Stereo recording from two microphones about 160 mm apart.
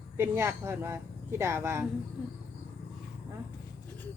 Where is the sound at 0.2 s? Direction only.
15° right (ahead or behind).